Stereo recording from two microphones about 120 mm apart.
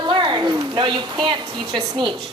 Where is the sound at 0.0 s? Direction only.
40° right (ahead or behind).